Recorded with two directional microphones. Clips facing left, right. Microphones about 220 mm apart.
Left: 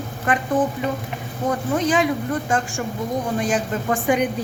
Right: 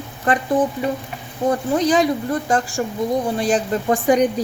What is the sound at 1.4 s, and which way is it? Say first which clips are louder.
Speech: right 3 dB; 35° right (ahead or behind).